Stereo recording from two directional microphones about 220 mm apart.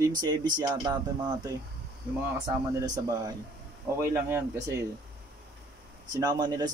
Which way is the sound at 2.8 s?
15° right (ahead or behind).